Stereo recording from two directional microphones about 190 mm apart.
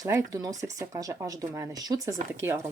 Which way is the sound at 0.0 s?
15° right (ahead or behind).